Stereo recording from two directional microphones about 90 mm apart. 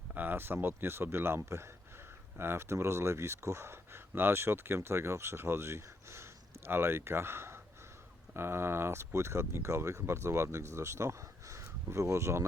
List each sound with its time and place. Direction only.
0.1 s speech: 20° right (ahead or behind)